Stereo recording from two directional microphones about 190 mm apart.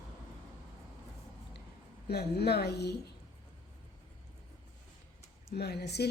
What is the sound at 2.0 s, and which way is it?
Speech, 60° left (ahead or behind).